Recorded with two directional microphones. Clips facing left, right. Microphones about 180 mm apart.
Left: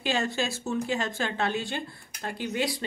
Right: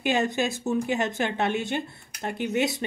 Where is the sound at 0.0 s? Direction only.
20° right (ahead or behind).